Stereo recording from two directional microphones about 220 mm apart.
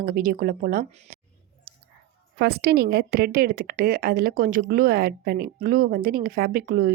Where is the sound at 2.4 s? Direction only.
50° right (ahead or behind).